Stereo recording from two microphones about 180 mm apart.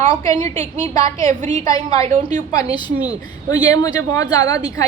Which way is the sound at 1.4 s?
40° right (ahead or behind).